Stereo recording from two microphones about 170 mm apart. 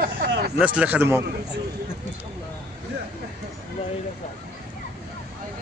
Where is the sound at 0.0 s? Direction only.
70° right (ahead or behind).